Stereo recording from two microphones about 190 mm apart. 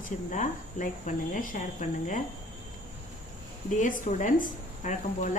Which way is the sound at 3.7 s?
40° left (ahead or behind).